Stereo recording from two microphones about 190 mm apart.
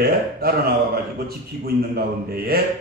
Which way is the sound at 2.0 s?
55° right (ahead or behind).